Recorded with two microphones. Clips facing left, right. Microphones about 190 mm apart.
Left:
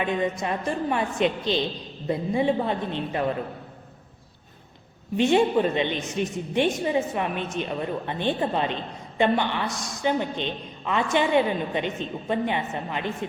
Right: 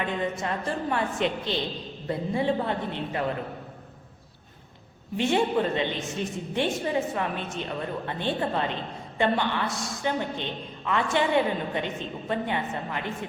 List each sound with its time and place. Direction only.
0.0 s a woman's voice: 15° left (ahead or behind)
5.1 s a woman's voice: 20° left (ahead or behind)